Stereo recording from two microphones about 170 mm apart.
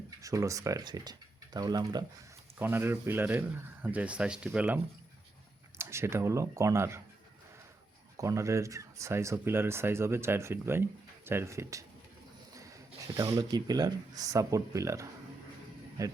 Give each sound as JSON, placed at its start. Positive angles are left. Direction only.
{"t": 0.2, "sound": "speech", "side_deg": -20}
{"t": 2.6, "sound": "speech", "side_deg": -15}
{"t": 8.1, "sound": "speech", "side_deg": -20}
{"t": 13.3, "sound": "speech", "side_deg": -20}